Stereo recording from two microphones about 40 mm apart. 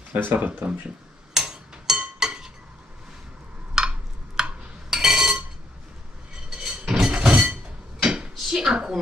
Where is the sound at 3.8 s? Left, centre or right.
Centre.